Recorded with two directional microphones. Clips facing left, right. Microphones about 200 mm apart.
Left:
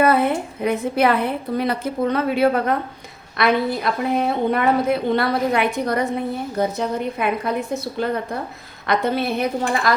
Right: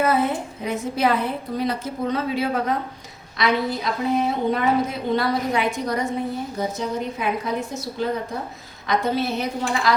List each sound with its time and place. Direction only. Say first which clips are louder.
0.0 s a woman's voice: left 4 dB; 60° left (ahead or behind)